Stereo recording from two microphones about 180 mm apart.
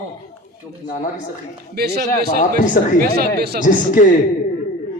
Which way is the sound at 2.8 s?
55° left (ahead or behind).